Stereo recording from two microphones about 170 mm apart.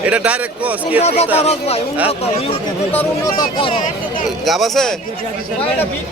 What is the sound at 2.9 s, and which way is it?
Speech, 20° left (ahead or behind).